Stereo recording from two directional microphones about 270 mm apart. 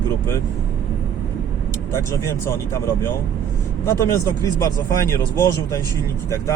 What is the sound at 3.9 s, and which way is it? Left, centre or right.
Speech, centre.